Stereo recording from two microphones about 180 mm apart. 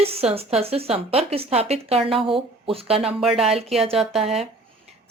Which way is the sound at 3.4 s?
35° right (ahead or behind).